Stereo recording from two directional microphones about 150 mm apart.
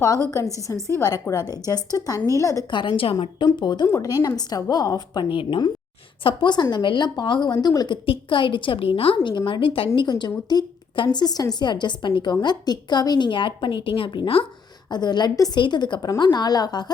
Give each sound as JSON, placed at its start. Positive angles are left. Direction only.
{"t": 0.3, "sound": "a woman's voice", "side_deg": 20}